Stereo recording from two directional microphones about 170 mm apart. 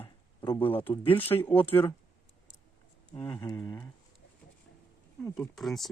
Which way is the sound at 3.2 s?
25° left (ahead or behind).